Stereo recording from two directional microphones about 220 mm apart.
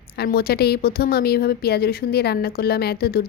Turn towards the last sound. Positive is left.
turn(degrees=45)  # may be behind; listen again after turning